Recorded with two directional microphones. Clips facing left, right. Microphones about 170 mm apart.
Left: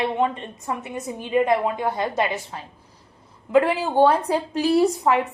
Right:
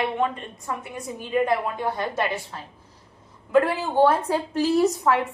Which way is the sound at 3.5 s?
15° left (ahead or behind).